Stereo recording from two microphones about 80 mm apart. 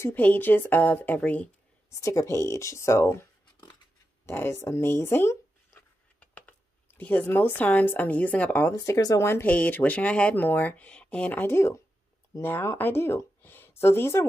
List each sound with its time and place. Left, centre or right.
0.1 s speech: left
1.9 s speech: left
4.3 s speech: left
6.1 s a sound: centre
7.0 s speech: left
8.7 s speech: left
9.3 s speech: left
11.5 s speech: left